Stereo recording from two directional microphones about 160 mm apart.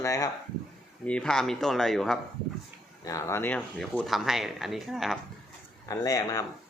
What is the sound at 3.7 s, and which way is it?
Speech, centre (ahead or behind).